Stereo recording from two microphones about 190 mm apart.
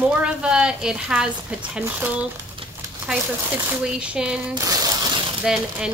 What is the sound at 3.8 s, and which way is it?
Speech, 5° right (ahead or behind).